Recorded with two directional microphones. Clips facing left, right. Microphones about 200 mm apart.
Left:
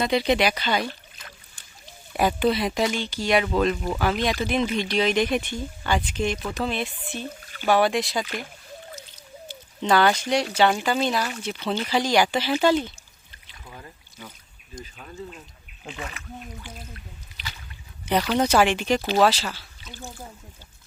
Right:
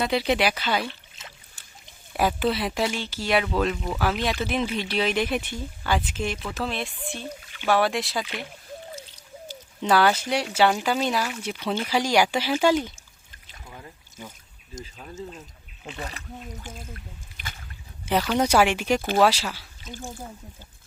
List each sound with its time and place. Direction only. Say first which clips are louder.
0.0 s speech: left 2 dB; 5° right (ahead or behind)
1.2 s a sound: even; 25° right (ahead or behind)
2.1 s speech: left 2 dB; centre (ahead or behind)
7.4 s rowboat: left 3 dB; 40° left (ahead or behind)
7.7 s speech: left 2 dB; centre (ahead or behind)
9.0 s a sound: right 1 dB; 30° right (ahead or behind)
9.8 s speech: left 1 dB; 5° right (ahead or behind)
14.8 s speech: right 1 dB; 25° right (ahead or behind)
16.0 s speech: right 1 dB; 35° right (ahead or behind)
16.6 s speech: right 1 dB; 50° right (ahead or behind)
18.1 s speech: left 1 dB; 5° right (ahead or behind)
19.8 s speech: right 4 dB; 45° right (ahead or behind)